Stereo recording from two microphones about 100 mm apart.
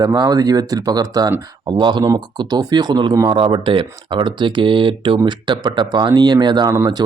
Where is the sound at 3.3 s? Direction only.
55° right (ahead or behind).